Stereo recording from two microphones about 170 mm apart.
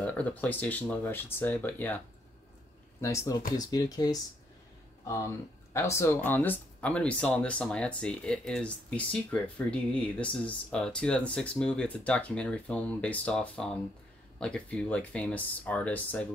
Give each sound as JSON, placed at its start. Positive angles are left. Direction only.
{"t": 0.0, "sound": "speech", "side_deg": 10}
{"t": 3.0, "sound": "speech", "side_deg": 15}